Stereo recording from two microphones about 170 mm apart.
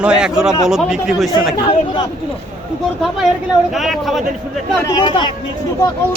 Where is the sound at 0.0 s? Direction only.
5° right (ahead or behind).